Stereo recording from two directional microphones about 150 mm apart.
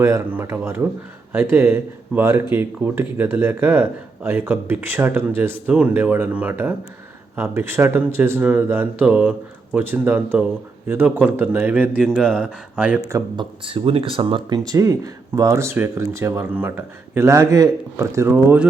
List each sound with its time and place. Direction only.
0.0 s speech: 15° right (ahead or behind)
13.1 s speech: 25° right (ahead or behind)